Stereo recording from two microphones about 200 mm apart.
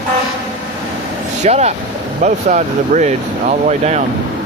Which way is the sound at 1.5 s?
35° right (ahead or behind).